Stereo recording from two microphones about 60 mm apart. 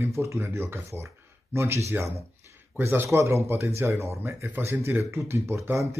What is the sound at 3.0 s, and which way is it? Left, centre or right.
Speech, right.